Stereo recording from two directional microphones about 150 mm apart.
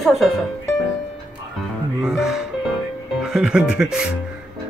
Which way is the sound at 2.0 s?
5° right (ahead or behind).